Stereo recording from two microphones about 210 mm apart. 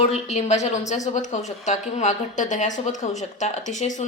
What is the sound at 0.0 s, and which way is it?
A woman's voice, 30° left (ahead or behind).